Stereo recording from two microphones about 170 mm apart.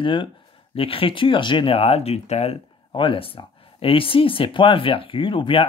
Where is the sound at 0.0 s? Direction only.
30° left (ahead or behind).